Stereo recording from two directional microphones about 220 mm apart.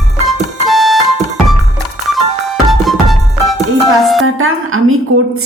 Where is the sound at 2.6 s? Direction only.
Centre (ahead or behind).